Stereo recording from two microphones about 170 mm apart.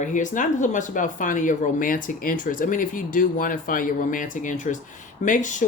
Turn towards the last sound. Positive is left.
turn(degrees=50)  # may be behind; listen again after turning